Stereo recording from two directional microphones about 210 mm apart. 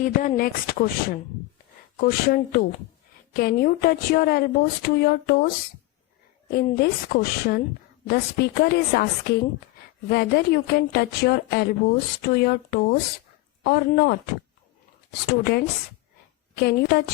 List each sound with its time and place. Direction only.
0.0 s speech: 40° left (ahead or behind)
2.0 s speech: 45° left (ahead or behind)
6.5 s speech: 45° left (ahead or behind)
15.3 s speech: 50° left (ahead or behind)